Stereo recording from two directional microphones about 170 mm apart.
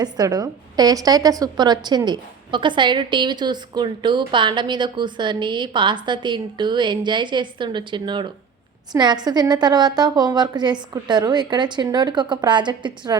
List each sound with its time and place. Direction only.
0.0 s a woman's voice: 20° right (ahead or behind)